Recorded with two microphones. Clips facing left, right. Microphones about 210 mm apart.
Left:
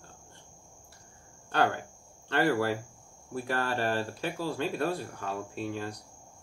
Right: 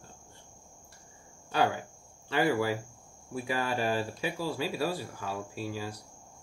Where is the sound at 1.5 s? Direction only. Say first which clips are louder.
Left 1 dB; 10° right (ahead or behind).